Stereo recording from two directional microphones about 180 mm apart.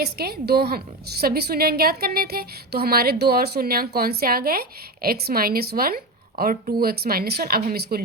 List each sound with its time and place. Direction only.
0.0 s speech: 60° right (ahead or behind)